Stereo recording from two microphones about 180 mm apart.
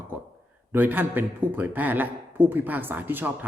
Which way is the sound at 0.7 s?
10° right (ahead or behind).